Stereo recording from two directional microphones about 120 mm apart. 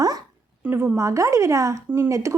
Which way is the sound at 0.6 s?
15° right (ahead or behind).